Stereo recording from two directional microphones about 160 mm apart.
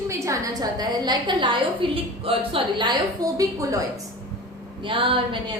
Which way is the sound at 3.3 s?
20° right (ahead or behind).